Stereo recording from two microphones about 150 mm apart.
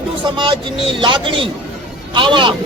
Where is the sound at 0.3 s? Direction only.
35° right (ahead or behind).